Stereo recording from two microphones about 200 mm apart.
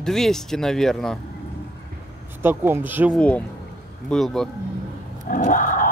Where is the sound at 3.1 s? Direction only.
5° left (ahead or behind).